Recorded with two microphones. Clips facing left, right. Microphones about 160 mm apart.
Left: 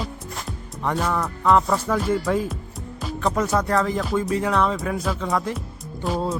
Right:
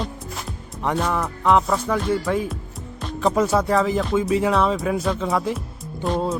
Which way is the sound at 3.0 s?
Centre (ahead or behind).